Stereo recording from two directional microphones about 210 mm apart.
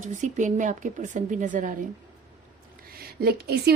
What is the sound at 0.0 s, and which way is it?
A woman's voice, 35° right (ahead or behind).